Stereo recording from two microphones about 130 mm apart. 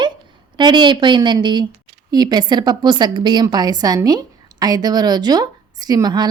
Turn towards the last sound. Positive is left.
turn(degrees=-30)  # may be behind; listen again after turning